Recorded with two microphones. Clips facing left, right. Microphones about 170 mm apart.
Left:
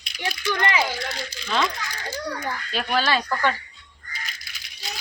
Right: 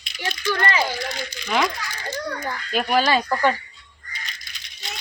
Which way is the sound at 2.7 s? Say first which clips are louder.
Right 4 dB; 10° right (ahead or behind).